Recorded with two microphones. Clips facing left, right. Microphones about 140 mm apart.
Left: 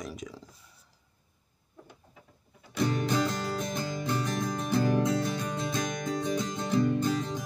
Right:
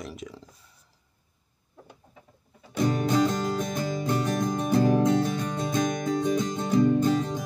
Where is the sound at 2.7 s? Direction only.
45° right (ahead or behind).